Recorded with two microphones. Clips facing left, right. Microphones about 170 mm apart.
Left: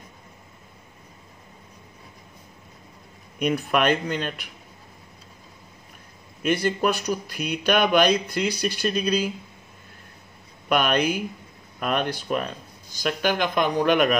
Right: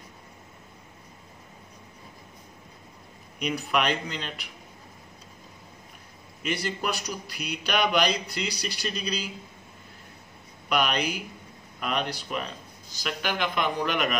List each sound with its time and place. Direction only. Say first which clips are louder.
3.3 s speech: left 5 dB; 50° left (ahead or behind)
6.4 s speech: left 8 dB; 50° left (ahead or behind)
10.7 s speech: left 5 dB; 50° left (ahead or behind)